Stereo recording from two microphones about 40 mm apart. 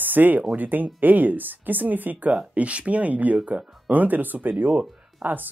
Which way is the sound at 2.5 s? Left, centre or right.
Right.